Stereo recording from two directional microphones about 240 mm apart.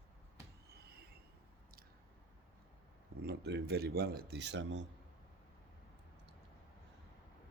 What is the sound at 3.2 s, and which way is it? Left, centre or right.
Speech, right.